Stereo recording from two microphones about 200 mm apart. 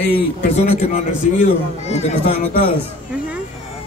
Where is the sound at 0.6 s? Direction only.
30° left (ahead or behind).